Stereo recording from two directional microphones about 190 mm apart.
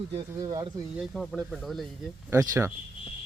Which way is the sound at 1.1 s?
Centre (ahead or behind).